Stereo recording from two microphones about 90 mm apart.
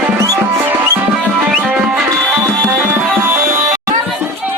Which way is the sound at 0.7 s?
20° right (ahead or behind).